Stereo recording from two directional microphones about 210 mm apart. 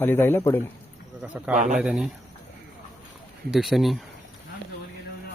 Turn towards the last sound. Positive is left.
turn(degrees=0)  # may be behind; listen again after turning